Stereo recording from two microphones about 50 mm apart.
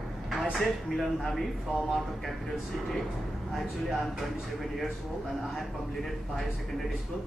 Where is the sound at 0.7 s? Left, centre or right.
Centre.